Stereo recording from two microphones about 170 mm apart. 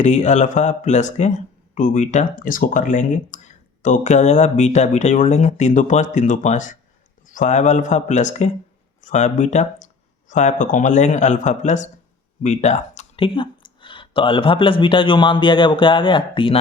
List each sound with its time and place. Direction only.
0.0 s speech: 45° left (ahead or behind)
13.2 s speech: 30° left (ahead or behind)